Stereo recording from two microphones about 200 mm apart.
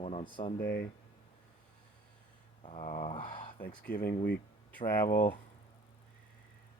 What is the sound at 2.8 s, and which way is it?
Speech, 45° left (ahead or behind).